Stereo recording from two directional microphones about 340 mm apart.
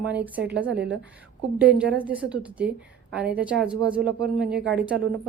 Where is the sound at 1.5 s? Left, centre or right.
Centre.